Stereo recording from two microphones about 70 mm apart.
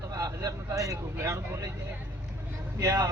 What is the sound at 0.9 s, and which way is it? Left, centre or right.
Vehicle, right.